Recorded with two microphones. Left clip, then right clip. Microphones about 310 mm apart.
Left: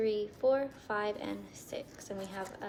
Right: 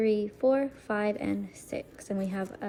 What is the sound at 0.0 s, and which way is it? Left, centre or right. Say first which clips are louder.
A woman's voice: right 4 dB; centre.